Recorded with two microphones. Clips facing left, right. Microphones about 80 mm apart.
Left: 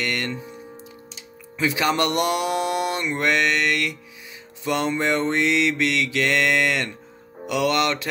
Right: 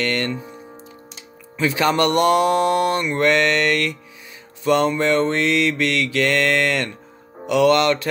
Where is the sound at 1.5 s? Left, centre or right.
Centre.